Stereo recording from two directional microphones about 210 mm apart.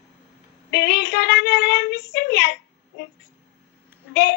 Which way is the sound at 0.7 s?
50° left (ahead or behind).